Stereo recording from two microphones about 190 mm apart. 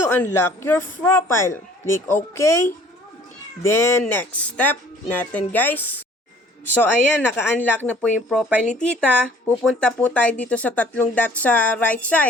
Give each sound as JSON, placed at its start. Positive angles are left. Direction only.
{"t": 0.0, "sound": "speech", "side_deg": 15}
{"t": 8.3, "sound": "speech", "side_deg": -5}